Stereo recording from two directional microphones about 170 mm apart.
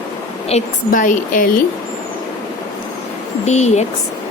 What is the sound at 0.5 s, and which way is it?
Speech, 40° left (ahead or behind).